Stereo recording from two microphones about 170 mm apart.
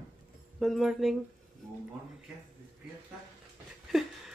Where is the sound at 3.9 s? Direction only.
Centre (ahead or behind).